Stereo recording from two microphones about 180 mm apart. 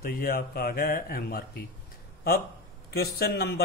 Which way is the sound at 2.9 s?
60° left (ahead or behind).